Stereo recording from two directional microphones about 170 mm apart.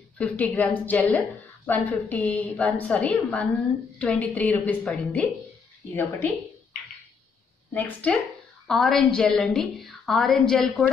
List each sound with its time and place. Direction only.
0.2 s a woman's voice: 10° left (ahead or behind)
7.7 s a woman's voice: 10° left (ahead or behind)